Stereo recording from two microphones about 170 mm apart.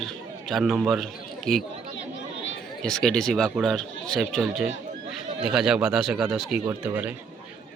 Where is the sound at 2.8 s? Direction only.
5° left (ahead or behind).